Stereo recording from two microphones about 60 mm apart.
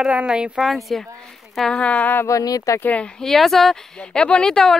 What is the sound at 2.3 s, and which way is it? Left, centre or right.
Speech, left.